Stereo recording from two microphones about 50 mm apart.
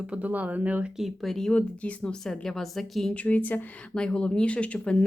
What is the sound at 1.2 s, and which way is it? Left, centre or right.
Speech, centre.